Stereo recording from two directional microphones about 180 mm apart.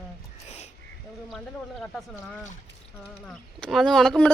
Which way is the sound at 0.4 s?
35° left (ahead or behind).